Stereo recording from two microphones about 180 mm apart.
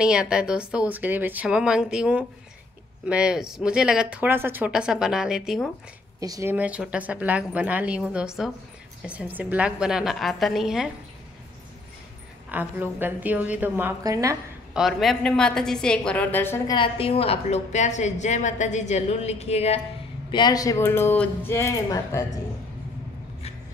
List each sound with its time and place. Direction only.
0.0 s speech: 5° right (ahead or behind)
6.1 s speech: 20° right (ahead or behind)
6.5 s a woman's voice: 10° right (ahead or behind)
12.4 s a woman's voice: 10° right (ahead or behind)
14.7 s speech: centre (ahead or behind)
16.7 s a woman's voice: 30° left (ahead or behind)
20.2 s speech: 25° left (ahead or behind)